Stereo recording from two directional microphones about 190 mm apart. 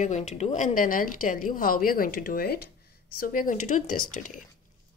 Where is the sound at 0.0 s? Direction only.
35° left (ahead or behind).